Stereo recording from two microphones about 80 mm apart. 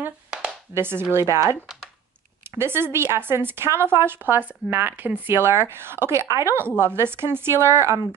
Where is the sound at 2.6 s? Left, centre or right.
Right.